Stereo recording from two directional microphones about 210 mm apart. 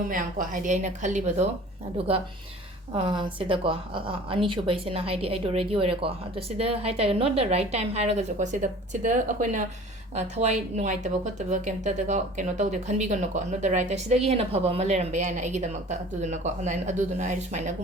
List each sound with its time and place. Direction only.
0.1 s a woman's voice: 40° right (ahead or behind)
2.9 s a woman's voice: 20° right (ahead or behind)